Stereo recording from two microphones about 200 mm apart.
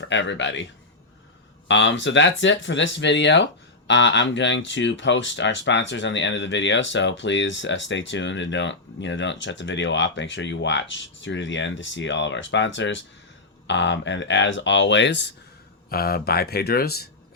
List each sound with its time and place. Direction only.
0.0 s speech: 65° left (ahead or behind)
1.6 s speech: 65° left (ahead or behind)
15.9 s speech: 50° left (ahead or behind)